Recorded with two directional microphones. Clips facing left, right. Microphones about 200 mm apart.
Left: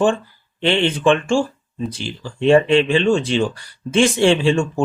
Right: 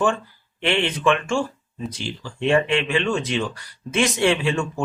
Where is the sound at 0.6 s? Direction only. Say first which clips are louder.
Left 4 dB; 30° left (ahead or behind).